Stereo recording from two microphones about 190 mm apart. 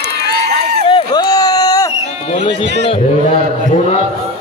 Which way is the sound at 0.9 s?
20° left (ahead or behind).